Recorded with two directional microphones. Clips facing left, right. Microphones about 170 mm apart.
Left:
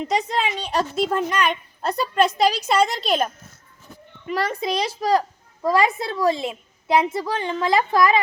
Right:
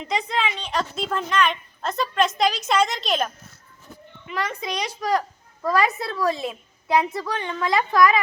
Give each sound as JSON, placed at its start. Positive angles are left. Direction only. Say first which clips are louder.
{"t": 0.0, "sound": "a child's voice", "louder": "left 3 dB", "side_deg": 40}
{"t": 0.9, "sound": "a woman's voice", "louder": "even", "side_deg": 10}
{"t": 4.3, "sound": "a child's voice", "louder": "left 5 dB", "side_deg": 35}